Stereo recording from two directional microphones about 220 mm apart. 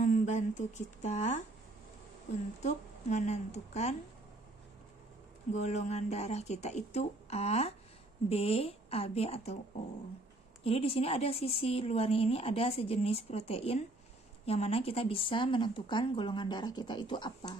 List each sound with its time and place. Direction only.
0.0 s speech: 35° left (ahead or behind)
2.6 s speech: 30° left (ahead or behind)
5.5 s speech: 30° left (ahead or behind)
10.6 s speech: 25° left (ahead or behind)